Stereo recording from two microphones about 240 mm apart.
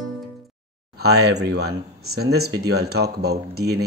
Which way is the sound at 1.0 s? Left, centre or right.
Right.